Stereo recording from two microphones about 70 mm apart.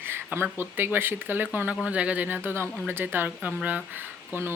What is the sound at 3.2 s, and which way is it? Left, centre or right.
Speech, right.